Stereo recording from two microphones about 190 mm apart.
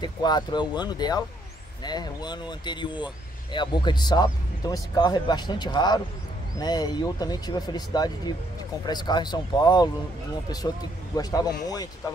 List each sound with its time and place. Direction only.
0.0 s speech: 20° left (ahead or behind)
11.1 s speech: 20° left (ahead or behind)